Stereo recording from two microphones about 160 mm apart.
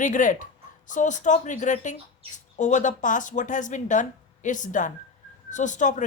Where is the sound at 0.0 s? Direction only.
55° left (ahead or behind).